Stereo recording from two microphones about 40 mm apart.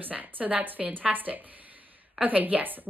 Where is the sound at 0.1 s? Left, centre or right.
Right.